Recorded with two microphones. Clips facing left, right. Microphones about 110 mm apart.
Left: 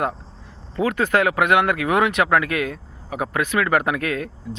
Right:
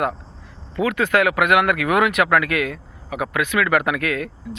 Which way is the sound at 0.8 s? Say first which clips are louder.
Right 1 dB; 35° left (ahead or behind).